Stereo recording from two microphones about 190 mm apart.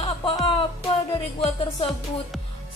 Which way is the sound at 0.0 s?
25° left (ahead or behind).